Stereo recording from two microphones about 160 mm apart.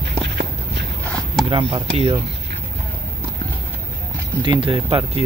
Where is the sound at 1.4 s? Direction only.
30° right (ahead or behind).